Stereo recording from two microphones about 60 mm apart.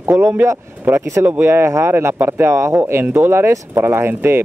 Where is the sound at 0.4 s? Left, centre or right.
Right.